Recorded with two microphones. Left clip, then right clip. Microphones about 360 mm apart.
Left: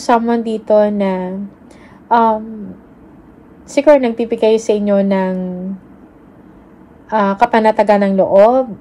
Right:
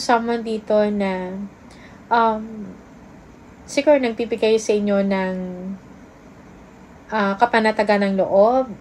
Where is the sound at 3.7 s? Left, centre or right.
Centre.